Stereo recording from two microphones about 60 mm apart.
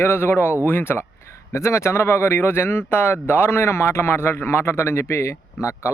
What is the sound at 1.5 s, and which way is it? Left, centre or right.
Speech, left.